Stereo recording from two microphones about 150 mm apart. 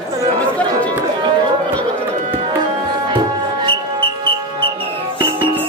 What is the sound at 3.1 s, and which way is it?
Music, 30° right (ahead or behind).